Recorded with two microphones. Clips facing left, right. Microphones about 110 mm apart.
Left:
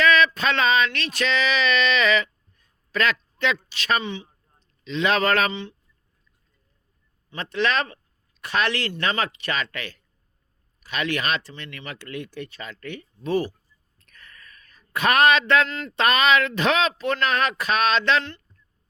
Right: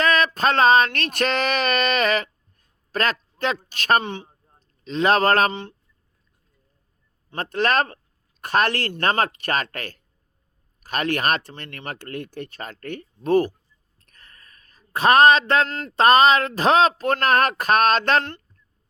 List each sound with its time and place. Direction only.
0.0 s a sound: 40° right (ahead or behind)
3.7 s a man's voice: 50° right (ahead or behind)
7.5 s speech: 45° right (ahead or behind)
14.0 s speech: 35° right (ahead or behind); by 18.4 s 50° right (ahead or behind)